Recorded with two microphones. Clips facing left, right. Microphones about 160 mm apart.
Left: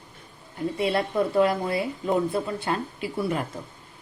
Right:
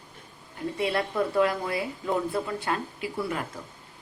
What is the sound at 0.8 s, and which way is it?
A woman's voice, 25° left (ahead or behind).